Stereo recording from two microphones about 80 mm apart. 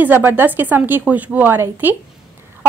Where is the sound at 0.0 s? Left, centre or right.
Right.